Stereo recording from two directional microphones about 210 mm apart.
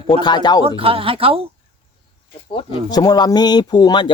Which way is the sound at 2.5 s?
20° left (ahead or behind).